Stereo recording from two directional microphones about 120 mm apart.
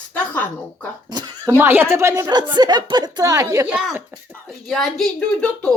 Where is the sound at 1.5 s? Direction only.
20° right (ahead or behind).